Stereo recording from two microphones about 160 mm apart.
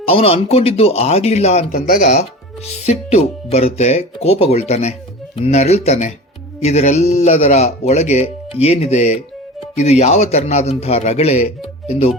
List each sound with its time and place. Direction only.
0.0 s speech: 35° left (ahead or behind)
1.7 s speech: 60° left (ahead or behind)
2.6 s speech: 40° left (ahead or behind)